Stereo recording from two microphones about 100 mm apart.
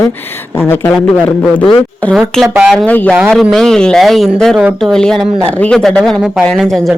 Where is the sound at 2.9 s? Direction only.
15° left (ahead or behind).